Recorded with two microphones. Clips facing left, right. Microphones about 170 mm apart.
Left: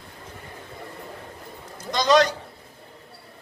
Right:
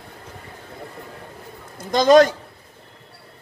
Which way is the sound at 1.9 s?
50° right (ahead or behind).